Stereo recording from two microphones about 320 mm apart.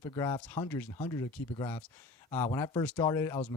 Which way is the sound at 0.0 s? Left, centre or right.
Centre.